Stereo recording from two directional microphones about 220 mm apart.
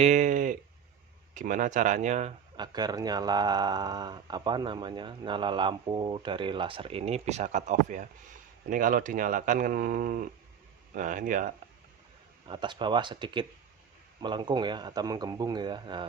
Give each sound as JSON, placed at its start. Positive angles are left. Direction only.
{"t": 0.0, "sound": "speech", "side_deg": -35}
{"t": 2.6, "sound": "speech", "side_deg": -20}
{"t": 12.5, "sound": "speech", "side_deg": -20}